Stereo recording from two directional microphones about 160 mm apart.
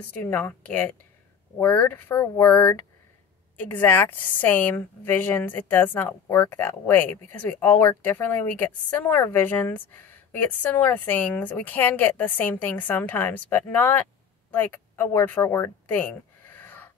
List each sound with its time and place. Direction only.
0.2 s a woman's voice: 10° left (ahead or behind)